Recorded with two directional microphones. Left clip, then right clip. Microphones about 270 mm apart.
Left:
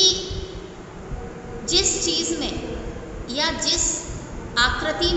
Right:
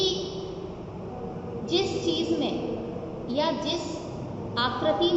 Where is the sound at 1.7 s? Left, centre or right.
Left.